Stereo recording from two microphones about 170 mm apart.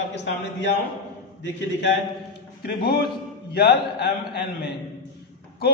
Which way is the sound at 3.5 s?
70° left (ahead or behind).